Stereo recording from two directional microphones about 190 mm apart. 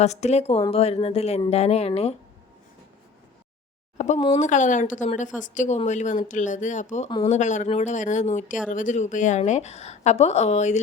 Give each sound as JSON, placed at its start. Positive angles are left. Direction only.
{"t": 0.0, "sound": "a woman's voice", "side_deg": 35}
{"t": 3.9, "sound": "a sound", "side_deg": 35}
{"t": 4.2, "sound": "a woman's voice", "side_deg": 35}